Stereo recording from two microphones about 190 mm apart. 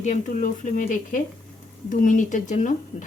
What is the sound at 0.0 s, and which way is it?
A woman's voice, 40° left (ahead or behind).